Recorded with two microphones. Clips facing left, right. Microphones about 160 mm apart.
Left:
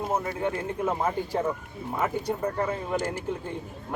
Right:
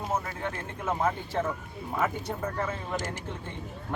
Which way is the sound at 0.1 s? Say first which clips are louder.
Left 3 dB; 10° left (ahead or behind).